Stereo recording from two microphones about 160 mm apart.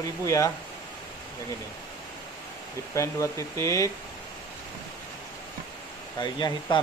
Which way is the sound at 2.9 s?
20° left (ahead or behind).